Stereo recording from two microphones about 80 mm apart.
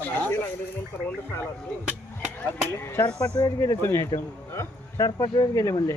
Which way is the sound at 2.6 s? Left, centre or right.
Left.